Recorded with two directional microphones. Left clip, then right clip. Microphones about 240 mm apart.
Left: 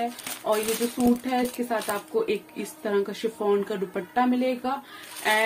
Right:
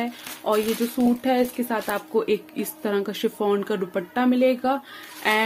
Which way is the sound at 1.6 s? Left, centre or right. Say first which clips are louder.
Right 1 dB; right.